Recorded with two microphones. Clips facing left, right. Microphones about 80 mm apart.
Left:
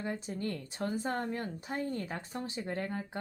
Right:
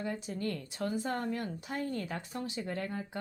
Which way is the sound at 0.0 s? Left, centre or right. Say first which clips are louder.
Right 1 dB; left.